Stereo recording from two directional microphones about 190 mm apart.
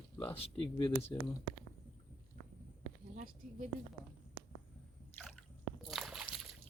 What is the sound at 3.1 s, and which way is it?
Speech, 40° right (ahead or behind).